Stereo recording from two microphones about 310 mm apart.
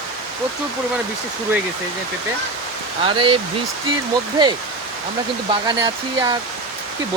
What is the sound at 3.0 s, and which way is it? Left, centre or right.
Speech, centre.